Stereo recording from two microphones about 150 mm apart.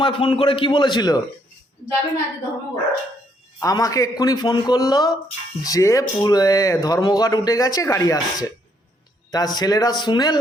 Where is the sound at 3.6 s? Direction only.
25° left (ahead or behind).